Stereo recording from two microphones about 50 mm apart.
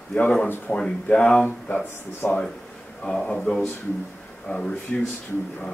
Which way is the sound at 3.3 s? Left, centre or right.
Centre.